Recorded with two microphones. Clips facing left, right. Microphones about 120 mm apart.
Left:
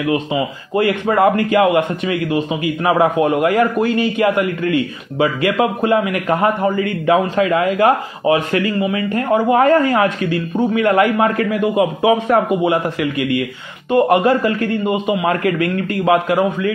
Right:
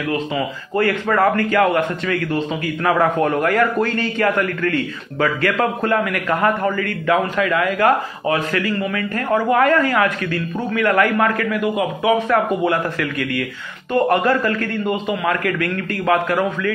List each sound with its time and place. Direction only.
0.1 s a man's voice: 15° left (ahead or behind)